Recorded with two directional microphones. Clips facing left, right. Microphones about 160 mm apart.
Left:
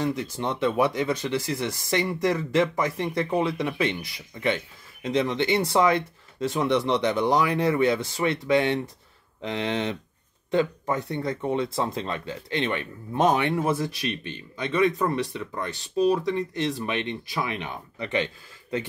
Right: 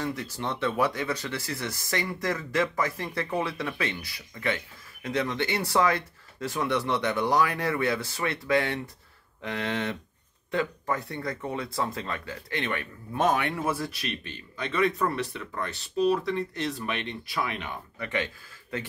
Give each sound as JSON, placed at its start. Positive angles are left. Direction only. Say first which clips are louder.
{"t": 0.0, "sound": "speech", "louder": "left 5 dB", "side_deg": 20}